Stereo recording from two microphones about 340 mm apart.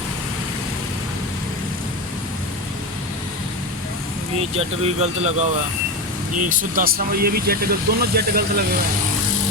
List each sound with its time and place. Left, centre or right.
4.4 s speech: centre